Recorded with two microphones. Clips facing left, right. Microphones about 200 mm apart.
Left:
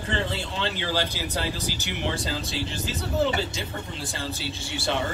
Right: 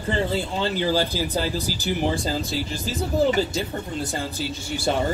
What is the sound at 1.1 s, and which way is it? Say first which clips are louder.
Speech: right 5 dB; 35° right (ahead or behind).